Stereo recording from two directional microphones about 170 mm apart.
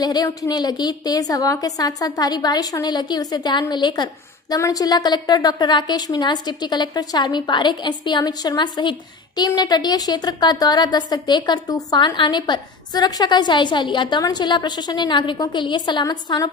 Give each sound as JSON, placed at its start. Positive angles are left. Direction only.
{"t": 0.0, "sound": "a woman's voice", "side_deg": 25}